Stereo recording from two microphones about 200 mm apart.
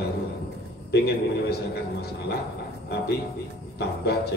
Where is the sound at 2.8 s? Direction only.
55° left (ahead or behind).